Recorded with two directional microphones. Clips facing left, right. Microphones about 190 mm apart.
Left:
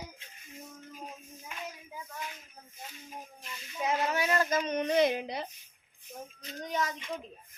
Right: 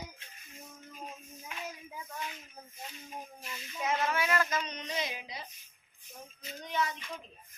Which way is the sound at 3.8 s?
20° left (ahead or behind).